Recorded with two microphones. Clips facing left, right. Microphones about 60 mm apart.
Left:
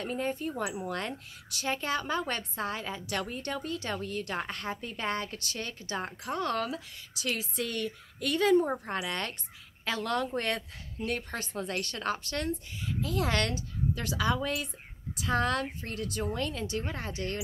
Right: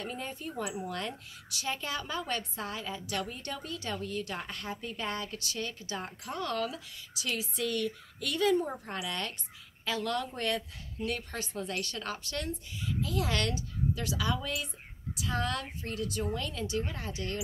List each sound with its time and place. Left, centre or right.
0.0 s speech: left